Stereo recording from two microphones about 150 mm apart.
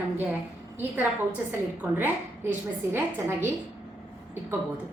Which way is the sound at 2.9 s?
15° right (ahead or behind).